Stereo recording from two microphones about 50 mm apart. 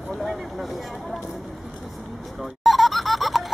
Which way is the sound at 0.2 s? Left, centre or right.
Centre.